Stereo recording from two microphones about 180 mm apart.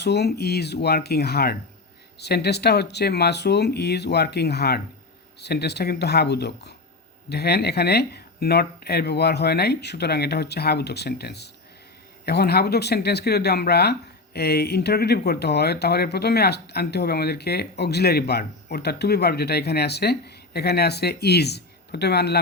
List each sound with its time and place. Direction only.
0.0 s speech: 65° left (ahead or behind)